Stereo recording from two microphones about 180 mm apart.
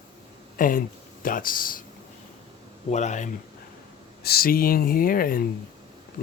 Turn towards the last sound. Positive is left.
turn(degrees=50)  # may be behind; listen again after turning